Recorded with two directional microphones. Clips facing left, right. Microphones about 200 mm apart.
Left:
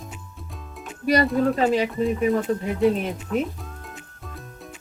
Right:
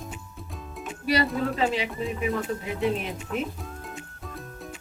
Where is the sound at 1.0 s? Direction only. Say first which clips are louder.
Left 5 dB; 45° left (ahead or behind).